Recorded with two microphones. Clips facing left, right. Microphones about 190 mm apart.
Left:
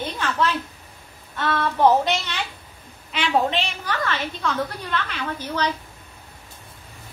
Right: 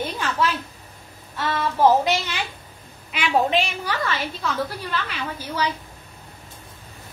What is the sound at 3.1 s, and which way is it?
A woman's voice, 10° right (ahead or behind).